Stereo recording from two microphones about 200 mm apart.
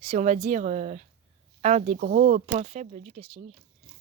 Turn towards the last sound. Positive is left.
turn(degrees=-30)  # may be behind; listen again after turning